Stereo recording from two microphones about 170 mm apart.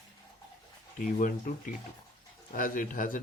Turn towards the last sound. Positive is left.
turn(degrees=50)  # may be behind; listen again after turning